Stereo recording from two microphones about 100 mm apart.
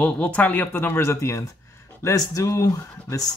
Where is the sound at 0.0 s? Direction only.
15° left (ahead or behind).